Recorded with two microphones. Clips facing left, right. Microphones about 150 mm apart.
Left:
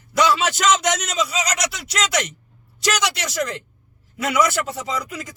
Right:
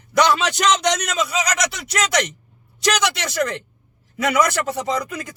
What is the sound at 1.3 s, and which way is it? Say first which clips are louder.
Speech: right 2 dB; 55° right (ahead or behind).